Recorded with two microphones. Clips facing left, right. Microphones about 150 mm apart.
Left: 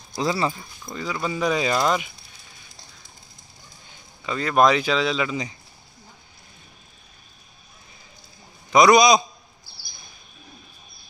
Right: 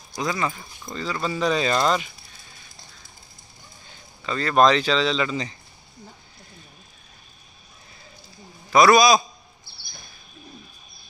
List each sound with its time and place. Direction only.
0.1 s speech: 25° left (ahead or behind)
0.8 s speech: 10° left (ahead or behind)
4.2 s speech: 10° left (ahead or behind)
8.6 s a man's voice: 15° left (ahead or behind)